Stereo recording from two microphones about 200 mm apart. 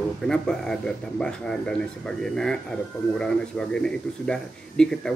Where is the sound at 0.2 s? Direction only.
5° left (ahead or behind).